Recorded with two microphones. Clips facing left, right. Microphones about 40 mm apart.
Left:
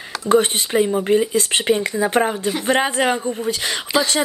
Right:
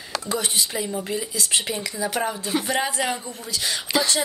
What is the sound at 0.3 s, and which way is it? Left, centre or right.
Speech, left.